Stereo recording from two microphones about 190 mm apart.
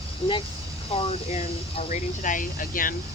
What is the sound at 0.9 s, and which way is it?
Speech, 30° left (ahead or behind).